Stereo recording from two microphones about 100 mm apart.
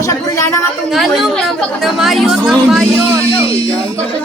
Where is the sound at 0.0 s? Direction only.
30° left (ahead or behind).